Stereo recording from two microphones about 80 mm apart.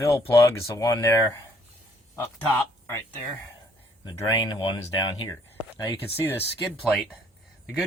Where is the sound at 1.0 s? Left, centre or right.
Left.